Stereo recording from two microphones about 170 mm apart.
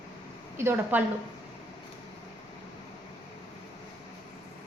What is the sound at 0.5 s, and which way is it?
Speech, 15° right (ahead or behind).